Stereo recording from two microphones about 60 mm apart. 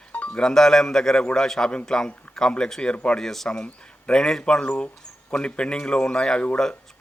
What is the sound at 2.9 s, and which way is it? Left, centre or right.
Speech, left.